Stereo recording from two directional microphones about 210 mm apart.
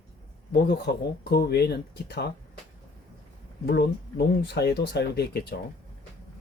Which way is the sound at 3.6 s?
50° left (ahead or behind).